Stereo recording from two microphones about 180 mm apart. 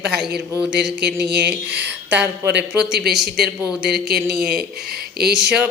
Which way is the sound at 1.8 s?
10° right (ahead or behind).